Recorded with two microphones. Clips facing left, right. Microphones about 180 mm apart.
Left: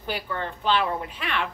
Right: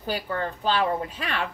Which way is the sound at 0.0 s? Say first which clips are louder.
Right 2 dB; 40° right (ahead or behind).